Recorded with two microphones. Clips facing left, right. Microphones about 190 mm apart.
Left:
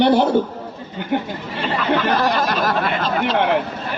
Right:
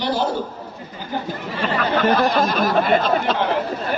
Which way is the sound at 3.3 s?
65° left (ahead or behind).